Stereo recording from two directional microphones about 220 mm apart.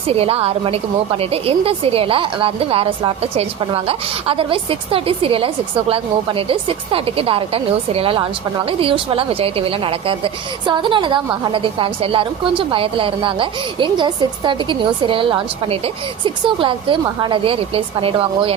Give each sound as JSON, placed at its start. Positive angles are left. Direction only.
{"t": 0.1, "sound": "speech", "side_deg": -25}